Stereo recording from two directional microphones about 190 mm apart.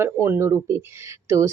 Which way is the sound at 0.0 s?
15° right (ahead or behind).